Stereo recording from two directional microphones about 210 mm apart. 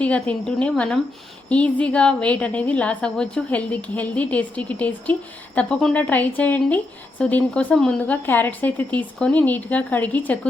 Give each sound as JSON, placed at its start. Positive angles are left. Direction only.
{"t": 0.0, "sound": "a woman's voice", "side_deg": 5}